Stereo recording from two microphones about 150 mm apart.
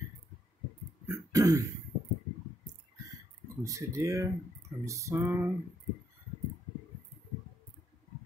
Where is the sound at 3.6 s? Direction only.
20° right (ahead or behind).